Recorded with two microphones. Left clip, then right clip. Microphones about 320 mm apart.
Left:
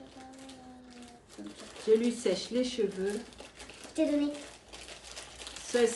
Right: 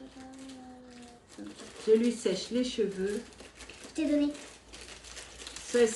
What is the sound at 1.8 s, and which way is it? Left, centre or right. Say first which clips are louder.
Speech: right 1 dB; centre.